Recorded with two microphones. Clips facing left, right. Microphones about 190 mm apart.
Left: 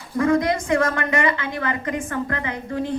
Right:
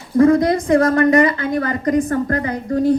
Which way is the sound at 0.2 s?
35° right (ahead or behind).